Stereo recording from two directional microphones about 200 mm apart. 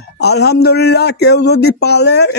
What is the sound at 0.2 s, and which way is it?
Speech, 55° left (ahead or behind).